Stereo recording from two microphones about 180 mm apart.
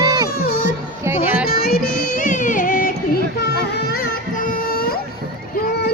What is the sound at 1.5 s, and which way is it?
Music, 60° left (ahead or behind).